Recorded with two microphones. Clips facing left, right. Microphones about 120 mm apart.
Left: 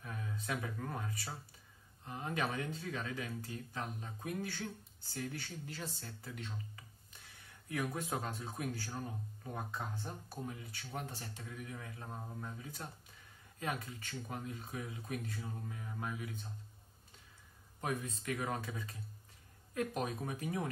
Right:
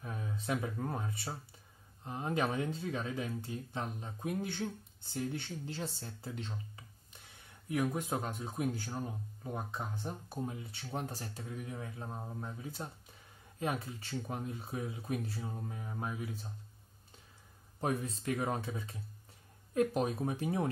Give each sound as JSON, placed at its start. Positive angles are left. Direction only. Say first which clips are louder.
{"t": 0.0, "sound": "speech", "louder": "right 3 dB", "side_deg": -25}
{"t": 17.7, "sound": "speech", "louder": "right 4 dB", "side_deg": -30}